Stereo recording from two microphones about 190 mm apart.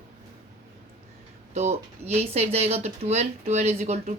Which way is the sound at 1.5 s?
35° right (ahead or behind).